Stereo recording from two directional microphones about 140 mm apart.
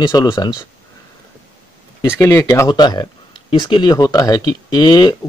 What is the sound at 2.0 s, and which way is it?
Speech, 20° left (ahead or behind).